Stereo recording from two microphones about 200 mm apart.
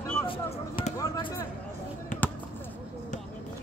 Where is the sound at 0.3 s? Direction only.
25° left (ahead or behind).